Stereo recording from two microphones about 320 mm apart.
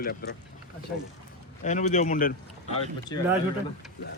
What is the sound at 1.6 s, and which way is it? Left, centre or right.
Speech, left.